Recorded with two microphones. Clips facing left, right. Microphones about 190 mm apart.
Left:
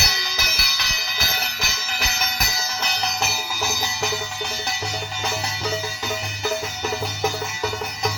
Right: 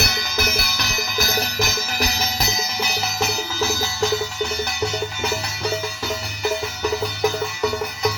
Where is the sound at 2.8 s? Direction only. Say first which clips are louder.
Even; centre (ahead or behind).